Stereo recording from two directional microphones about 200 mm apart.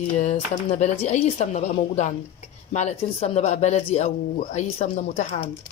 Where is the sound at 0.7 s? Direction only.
35° left (ahead or behind).